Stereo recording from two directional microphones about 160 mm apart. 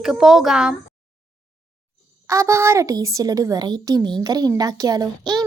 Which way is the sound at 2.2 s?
20° right (ahead or behind).